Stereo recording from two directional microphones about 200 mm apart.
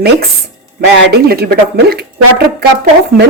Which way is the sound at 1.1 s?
50° right (ahead or behind).